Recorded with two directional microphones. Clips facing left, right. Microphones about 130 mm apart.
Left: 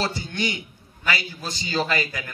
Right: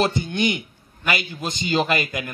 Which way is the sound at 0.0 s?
20° right (ahead or behind).